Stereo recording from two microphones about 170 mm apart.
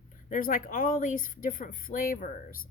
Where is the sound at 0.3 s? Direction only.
55° left (ahead or behind).